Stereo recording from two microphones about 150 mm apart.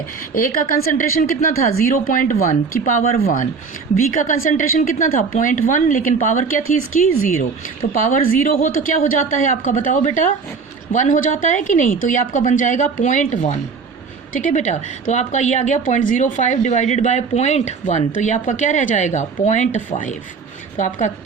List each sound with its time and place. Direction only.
0.3 s a woman's voice: 70° left (ahead or behind)
4.1 s a woman's voice: 60° left (ahead or behind)